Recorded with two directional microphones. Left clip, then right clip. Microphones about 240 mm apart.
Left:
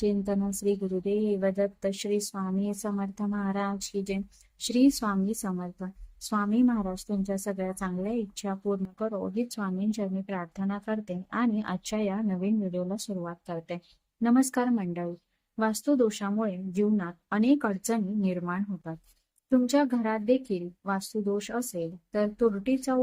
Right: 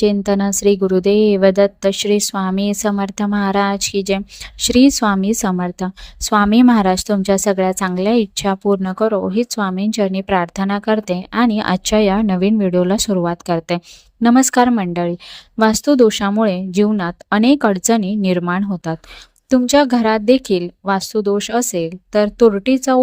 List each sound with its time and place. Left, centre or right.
0.0 s a woman's voice: right